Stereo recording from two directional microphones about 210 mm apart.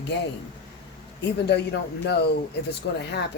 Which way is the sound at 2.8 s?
55° left (ahead or behind).